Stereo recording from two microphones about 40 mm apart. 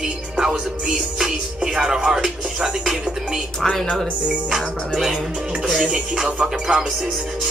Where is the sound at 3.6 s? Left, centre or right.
Centre.